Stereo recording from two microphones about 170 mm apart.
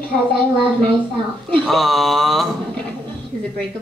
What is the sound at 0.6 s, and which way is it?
Speech, 5° left (ahead or behind).